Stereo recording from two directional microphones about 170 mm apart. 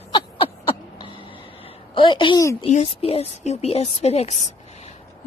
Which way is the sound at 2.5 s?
40° left (ahead or behind).